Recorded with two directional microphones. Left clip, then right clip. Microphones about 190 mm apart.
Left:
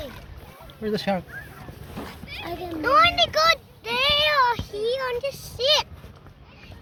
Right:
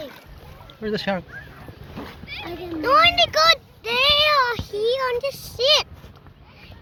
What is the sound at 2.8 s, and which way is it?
A child's voice, 35° right (ahead or behind).